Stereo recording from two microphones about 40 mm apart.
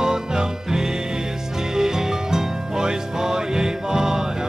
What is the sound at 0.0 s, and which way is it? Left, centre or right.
Music, centre.